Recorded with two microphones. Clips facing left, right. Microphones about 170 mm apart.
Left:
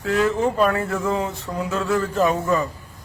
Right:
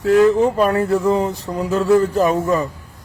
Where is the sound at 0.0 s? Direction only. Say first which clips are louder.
Right 7 dB; 35° right (ahead or behind).